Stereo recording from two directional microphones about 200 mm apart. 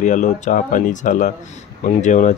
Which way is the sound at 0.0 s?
40° left (ahead or behind).